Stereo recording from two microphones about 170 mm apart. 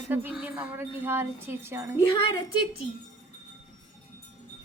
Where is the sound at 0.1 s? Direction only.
10° right (ahead or behind).